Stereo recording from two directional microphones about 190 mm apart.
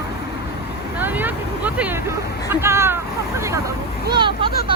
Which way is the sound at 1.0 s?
10° right (ahead or behind).